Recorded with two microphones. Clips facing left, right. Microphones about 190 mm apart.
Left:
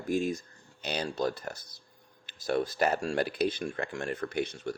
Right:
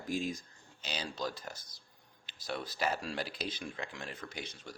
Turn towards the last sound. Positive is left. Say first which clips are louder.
# left 13 dB
turn(degrees=60)  # may be behind; listen again after turning